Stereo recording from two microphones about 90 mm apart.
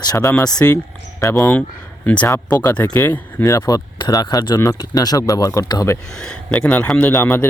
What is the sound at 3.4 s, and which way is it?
Speech, 35° left (ahead or behind).